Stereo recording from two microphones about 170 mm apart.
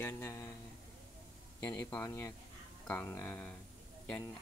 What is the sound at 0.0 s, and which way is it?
Speech, 15° left (ahead or behind).